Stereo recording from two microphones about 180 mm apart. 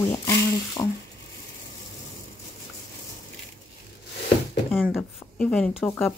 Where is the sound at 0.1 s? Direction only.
20° left (ahead or behind).